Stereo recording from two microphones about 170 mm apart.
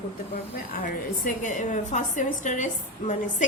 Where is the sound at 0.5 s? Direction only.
55° left (ahead or behind).